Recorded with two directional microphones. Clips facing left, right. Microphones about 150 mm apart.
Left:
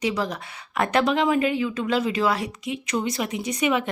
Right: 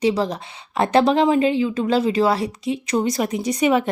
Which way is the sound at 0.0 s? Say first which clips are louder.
Right 6 dB; 30° right (ahead or behind).